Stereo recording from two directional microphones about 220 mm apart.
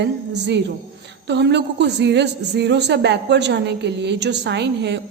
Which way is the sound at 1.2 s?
50° right (ahead or behind).